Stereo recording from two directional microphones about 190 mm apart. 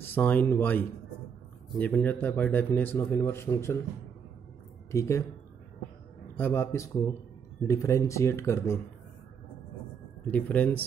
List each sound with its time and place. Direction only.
0.0 s a man's voice: 10° left (ahead or behind)
4.9 s a man's voice: 15° left (ahead or behind)
6.3 s a man's voice: 10° left (ahead or behind)
10.2 s a man's voice: 10° left (ahead or behind)